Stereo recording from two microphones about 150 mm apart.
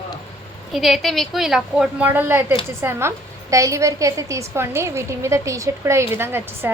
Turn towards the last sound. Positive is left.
turn(degrees=-15)  # may be behind; listen again after turning